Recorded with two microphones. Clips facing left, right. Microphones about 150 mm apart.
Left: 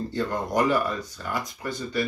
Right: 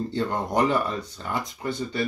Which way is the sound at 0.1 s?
25° right (ahead or behind).